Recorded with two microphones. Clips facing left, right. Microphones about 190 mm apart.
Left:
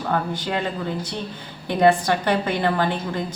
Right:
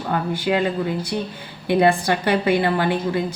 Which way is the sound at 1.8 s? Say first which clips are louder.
Left 2 dB; 45° left (ahead or behind).